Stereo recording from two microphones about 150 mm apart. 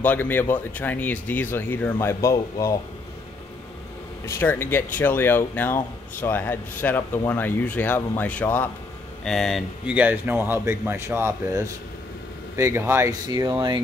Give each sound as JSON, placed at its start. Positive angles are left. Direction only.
{"t": 0.0, "sound": "speech", "side_deg": 10}
{"t": 4.3, "sound": "speech", "side_deg": 15}
{"t": 9.9, "sound": "speech", "side_deg": -10}